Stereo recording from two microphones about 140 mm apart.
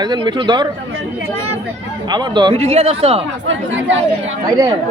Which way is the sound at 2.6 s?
50° right (ahead or behind).